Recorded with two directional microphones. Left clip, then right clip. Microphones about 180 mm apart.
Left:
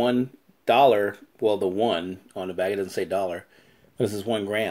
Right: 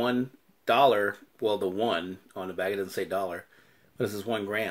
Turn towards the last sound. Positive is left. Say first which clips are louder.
# left 4 dB
turn(degrees=20)  # may be behind; listen again after turning